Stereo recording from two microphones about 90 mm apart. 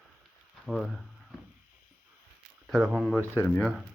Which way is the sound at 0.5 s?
Centre (ahead or behind).